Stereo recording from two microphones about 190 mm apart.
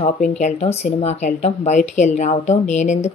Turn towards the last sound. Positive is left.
turn(degrees=40)  # may be behind; listen again after turning